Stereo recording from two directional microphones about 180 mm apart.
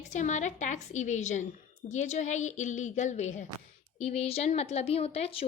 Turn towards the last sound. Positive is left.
turn(degrees=35)  # may be behind; listen again after turning